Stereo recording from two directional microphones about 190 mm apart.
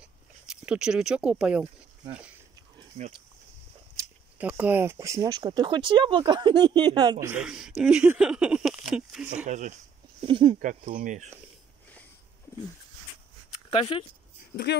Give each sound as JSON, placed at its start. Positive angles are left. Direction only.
{"t": 0.5, "sound": "speech", "side_deg": -5}
{"t": 4.0, "sound": "a sound", "side_deg": -20}
{"t": 4.4, "sound": "speech", "side_deg": -10}
{"t": 9.5, "sound": "speech", "side_deg": -40}
{"t": 10.2, "sound": "speech", "side_deg": -25}
{"t": 10.6, "sound": "speech", "side_deg": -45}
{"t": 13.7, "sound": "speech", "side_deg": 25}